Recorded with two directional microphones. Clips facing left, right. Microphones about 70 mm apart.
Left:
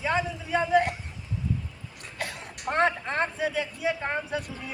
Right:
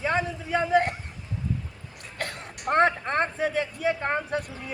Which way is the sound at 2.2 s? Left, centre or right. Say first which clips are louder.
Right 1 dB; right.